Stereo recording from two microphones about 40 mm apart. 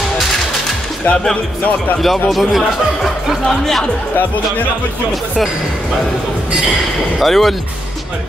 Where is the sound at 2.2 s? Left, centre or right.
Centre.